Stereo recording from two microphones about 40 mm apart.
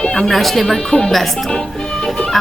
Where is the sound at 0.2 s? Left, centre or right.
Centre.